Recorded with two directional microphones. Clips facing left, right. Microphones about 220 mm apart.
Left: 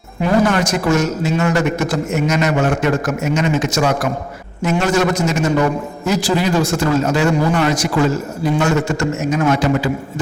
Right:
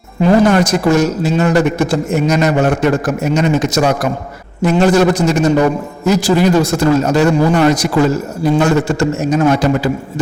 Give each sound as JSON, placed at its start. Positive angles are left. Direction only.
{"t": 0.4, "sound": "a man's voice", "side_deg": -35}